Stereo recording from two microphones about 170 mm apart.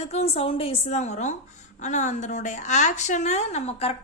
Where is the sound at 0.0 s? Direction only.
40° left (ahead or behind).